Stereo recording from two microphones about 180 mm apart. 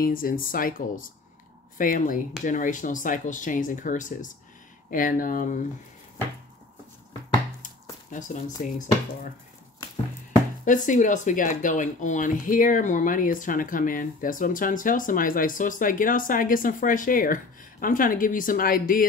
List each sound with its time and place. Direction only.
0.0 s speech: 50° left (ahead or behind)
8.1 s speech: 45° left (ahead or behind)
10.6 s speech: 45° left (ahead or behind)